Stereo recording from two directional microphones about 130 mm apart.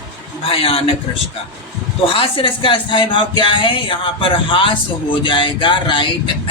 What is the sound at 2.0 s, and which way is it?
Speech, 45° left (ahead or behind).